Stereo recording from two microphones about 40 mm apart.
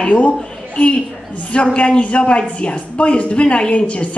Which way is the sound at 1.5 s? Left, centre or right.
Left.